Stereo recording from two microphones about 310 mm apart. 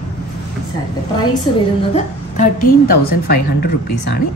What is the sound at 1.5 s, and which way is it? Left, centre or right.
A woman's voice, centre.